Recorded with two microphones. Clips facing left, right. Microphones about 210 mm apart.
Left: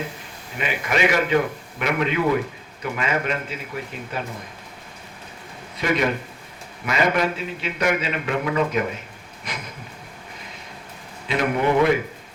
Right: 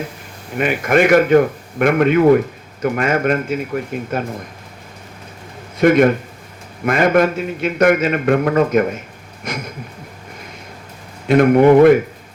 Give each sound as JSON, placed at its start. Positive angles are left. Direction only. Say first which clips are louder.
{"t": 0.5, "sound": "a man's voice", "louder": "right 9 dB", "side_deg": -50}
{"t": 5.7, "sound": "a man's voice", "louder": "right 10 dB", "side_deg": -50}
{"t": 11.3, "sound": "a man's voice", "louder": "right 11 dB", "side_deg": -50}